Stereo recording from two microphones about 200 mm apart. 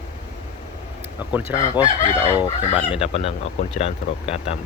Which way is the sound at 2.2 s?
25° left (ahead or behind).